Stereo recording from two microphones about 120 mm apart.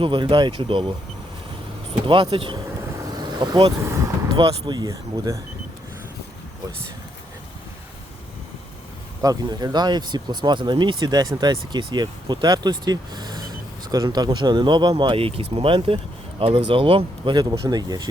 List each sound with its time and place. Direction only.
0.0 s speech: 40° right (ahead or behind)
2.0 s speech: 40° right (ahead or behind)
3.2 s vehicle: 35° right (ahead or behind)
4.4 s speech: 40° right (ahead or behind)
9.2 s speech: 35° right (ahead or behind)